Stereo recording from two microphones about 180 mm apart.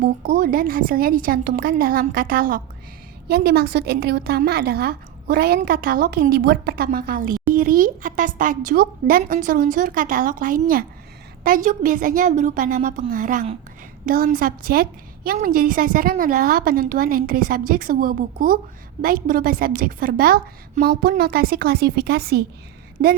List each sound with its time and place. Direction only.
0.0 s a woman's voice: 55° right (ahead or behind)